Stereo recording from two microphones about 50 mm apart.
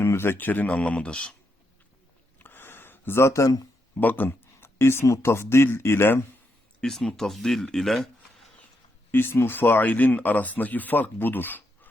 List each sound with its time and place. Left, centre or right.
0.0 s speech: left
0.8 s a man's voice: left
2.4 s gasp: left
3.9 s speech: left
4.6 s speech: left
6.8 s speech: centre
9.1 s speech: left